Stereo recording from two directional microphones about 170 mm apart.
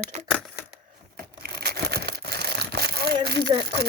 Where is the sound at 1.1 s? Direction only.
65° right (ahead or behind).